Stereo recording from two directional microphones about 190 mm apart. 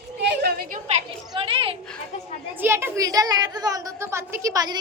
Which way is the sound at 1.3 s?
30° right (ahead or behind).